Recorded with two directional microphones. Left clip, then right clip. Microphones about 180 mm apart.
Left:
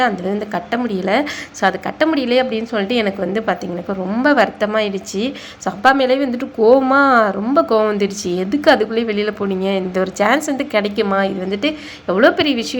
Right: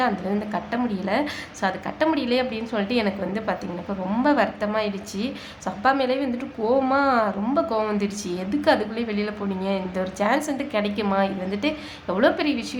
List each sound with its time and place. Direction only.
0.5 s a woman's voice: 30° left (ahead or behind)